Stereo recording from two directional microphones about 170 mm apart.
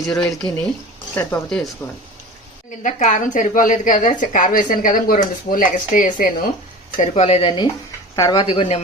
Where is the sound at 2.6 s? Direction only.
50° left (ahead or behind).